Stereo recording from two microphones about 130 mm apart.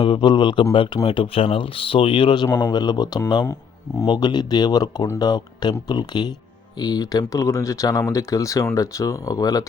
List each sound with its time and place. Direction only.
0.0 s speech: 40° left (ahead or behind)
3.4 s speech: 20° left (ahead or behind)
4.0 s speech: 35° left (ahead or behind)